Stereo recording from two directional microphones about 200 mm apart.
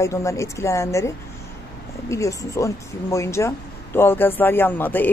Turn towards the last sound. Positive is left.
turn(degrees=10)  # may be behind; listen again after turning